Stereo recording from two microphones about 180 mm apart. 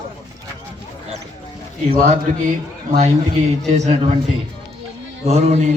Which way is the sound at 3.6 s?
40° right (ahead or behind).